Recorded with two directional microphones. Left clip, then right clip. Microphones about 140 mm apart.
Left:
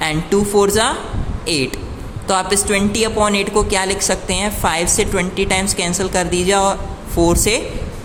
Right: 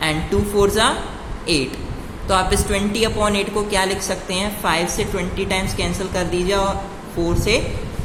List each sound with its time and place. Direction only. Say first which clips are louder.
0.0 s speech: left 3 dB; 45° left (ahead or behind)
2.2 s a woman's voice: left 2 dB; 40° left (ahead or behind)